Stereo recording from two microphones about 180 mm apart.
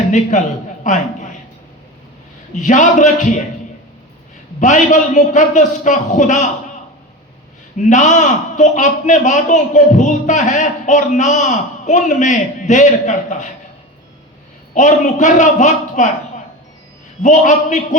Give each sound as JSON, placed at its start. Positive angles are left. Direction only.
{"t": 0.1, "sound": "a man's voice", "side_deg": 45}
{"t": 2.6, "sound": "a man's voice", "side_deg": 40}
{"t": 4.6, "sound": "a man's voice", "side_deg": 40}
{"t": 7.8, "sound": "a man's voice", "side_deg": 45}
{"t": 14.8, "sound": "a man's voice", "side_deg": 40}
{"t": 17.2, "sound": "a man's voice", "side_deg": 40}